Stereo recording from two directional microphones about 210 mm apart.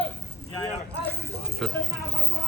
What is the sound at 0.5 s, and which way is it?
Speech, 15° left (ahead or behind).